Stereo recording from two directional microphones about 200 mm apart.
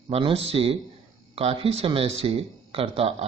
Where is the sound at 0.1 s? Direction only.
30° right (ahead or behind).